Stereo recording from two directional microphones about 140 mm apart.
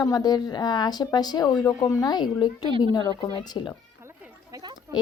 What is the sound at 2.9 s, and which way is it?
Speech, 30° left (ahead or behind).